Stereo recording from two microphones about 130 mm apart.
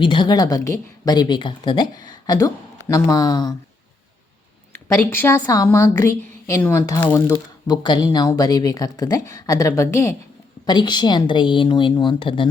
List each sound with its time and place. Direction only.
0.0 s speech: 40° left (ahead or behind)
4.7 s a woman's voice: 15° left (ahead or behind)
7.7 s speech: 35° left (ahead or behind)
10.7 s speech: 35° left (ahead or behind)